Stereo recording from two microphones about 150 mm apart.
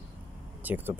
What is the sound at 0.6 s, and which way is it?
Speech, 10° right (ahead or behind).